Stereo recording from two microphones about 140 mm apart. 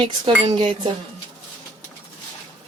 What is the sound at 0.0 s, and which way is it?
Speech, 35° right (ahead or behind).